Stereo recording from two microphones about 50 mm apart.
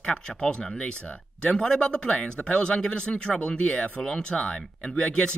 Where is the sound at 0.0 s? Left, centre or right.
Centre.